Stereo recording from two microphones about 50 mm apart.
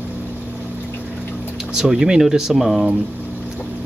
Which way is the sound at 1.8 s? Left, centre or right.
Centre.